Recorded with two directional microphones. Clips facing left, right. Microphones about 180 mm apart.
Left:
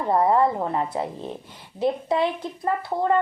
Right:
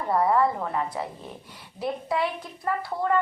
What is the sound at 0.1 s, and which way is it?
Speech, 25° left (ahead or behind).